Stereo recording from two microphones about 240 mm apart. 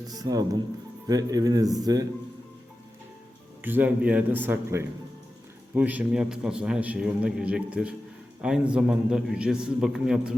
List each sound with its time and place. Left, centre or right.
0.0 s a man's voice: centre
3.6 s a man's voice: centre